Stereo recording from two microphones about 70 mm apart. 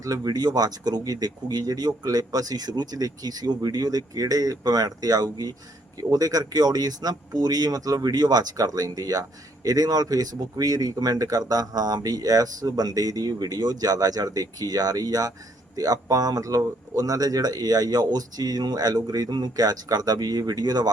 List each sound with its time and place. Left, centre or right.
0.0 s speech: right